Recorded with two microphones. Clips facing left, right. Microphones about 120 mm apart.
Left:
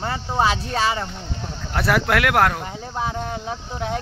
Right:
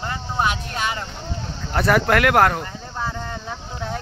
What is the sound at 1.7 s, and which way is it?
Speech, centre (ahead or behind).